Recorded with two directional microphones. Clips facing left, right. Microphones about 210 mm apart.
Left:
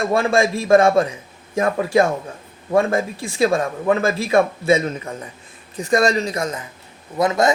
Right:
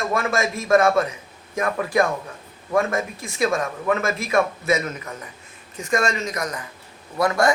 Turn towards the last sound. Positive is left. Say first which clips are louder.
# left 2 dB
turn(degrees=20)  # may be behind; listen again after turning